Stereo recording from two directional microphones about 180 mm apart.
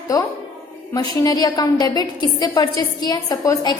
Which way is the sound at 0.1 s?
20° left (ahead or behind).